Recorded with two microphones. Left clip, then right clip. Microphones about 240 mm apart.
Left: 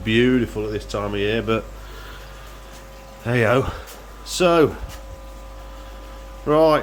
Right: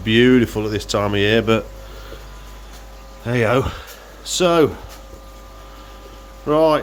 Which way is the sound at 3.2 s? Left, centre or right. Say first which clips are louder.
Right 1 dB; centre.